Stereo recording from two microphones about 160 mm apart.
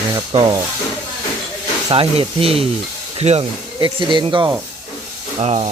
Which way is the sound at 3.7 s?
30° right (ahead or behind).